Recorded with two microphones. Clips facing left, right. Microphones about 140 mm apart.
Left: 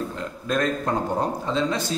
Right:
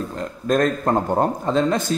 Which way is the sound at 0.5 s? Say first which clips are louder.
Right 5 dB; 45° right (ahead or behind).